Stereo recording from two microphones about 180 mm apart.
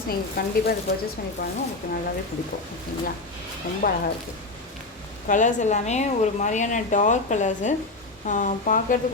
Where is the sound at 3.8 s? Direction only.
55° left (ahead or behind).